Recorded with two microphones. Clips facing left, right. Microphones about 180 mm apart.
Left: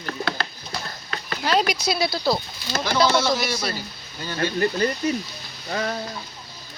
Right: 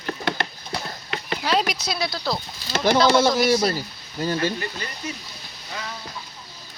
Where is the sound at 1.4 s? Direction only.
Centre (ahead or behind).